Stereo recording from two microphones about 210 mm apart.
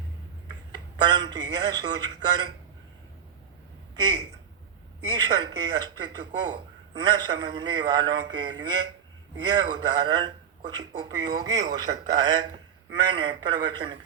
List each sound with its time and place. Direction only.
1.0 s speech: 20° right (ahead or behind)
5.1 s speech: 20° right (ahead or behind)